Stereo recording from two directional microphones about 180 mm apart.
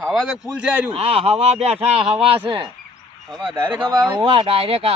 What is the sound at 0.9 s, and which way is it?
Speech, 30° right (ahead or behind).